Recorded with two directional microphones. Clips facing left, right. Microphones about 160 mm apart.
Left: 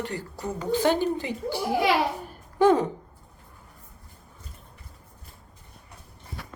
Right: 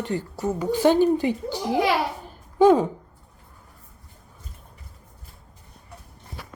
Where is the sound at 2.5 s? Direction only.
15° right (ahead or behind).